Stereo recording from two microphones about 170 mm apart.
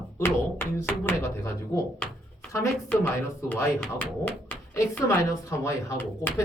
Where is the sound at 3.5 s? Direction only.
15° left (ahead or behind).